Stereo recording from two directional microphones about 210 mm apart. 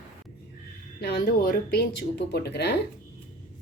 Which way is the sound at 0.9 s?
45° left (ahead or behind).